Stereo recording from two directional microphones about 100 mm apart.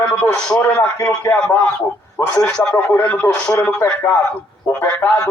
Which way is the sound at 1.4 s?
15° left (ahead or behind).